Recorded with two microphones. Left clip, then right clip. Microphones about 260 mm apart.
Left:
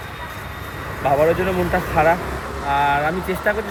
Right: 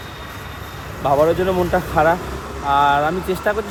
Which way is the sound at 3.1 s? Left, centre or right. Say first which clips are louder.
Right 2 dB; left.